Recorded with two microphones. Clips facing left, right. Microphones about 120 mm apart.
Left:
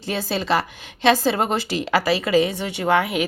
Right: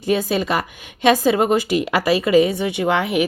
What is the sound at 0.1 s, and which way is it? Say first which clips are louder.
A woman's voice: right 3 dB; 15° right (ahead or behind).